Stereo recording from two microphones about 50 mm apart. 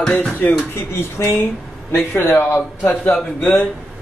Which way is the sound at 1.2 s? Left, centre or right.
Left.